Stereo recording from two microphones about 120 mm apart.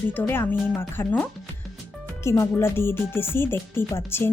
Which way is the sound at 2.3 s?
20° left (ahead or behind).